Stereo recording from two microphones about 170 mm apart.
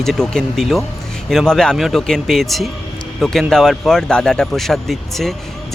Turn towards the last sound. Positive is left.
turn(degrees=0)  # may be behind; listen again after turning